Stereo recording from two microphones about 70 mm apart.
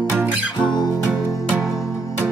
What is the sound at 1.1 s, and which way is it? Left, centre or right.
Music, centre.